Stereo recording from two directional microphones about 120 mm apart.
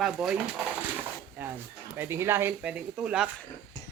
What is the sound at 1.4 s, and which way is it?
Speech, 15° right (ahead or behind).